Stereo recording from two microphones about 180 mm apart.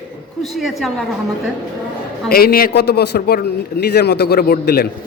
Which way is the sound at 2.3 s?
55° left (ahead or behind).